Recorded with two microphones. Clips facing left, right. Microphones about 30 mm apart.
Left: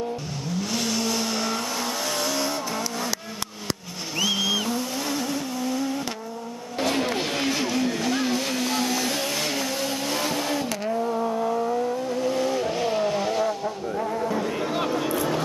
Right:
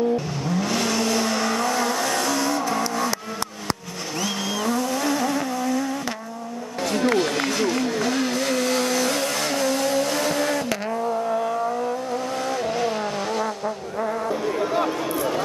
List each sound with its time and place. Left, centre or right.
0.6 s vehicle: centre
4.2 s vehicle: centre
5.6 s vehicle: centre
6.8 s a sound: centre
7.3 s vehicle: centre
12.1 s vehicle: centre